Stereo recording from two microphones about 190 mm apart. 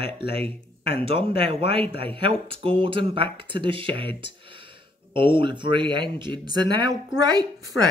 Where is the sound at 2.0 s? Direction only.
30° right (ahead or behind).